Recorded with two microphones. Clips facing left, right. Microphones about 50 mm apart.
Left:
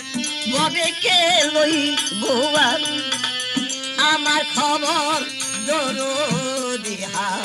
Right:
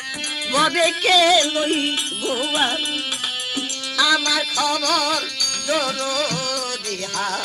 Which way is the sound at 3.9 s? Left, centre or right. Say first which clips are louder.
Left 1 dB; left.